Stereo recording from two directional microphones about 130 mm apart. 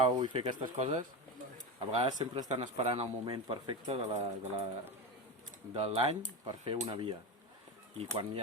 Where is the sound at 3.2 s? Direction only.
35° right (ahead or behind).